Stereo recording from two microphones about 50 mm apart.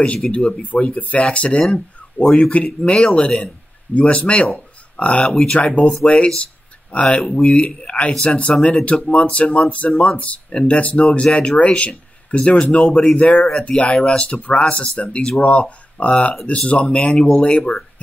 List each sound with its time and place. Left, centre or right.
0.0 s speech: left
5.2 s speech: centre
6.0 s speech: left